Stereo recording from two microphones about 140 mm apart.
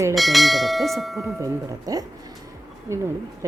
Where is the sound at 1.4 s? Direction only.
25° right (ahead or behind).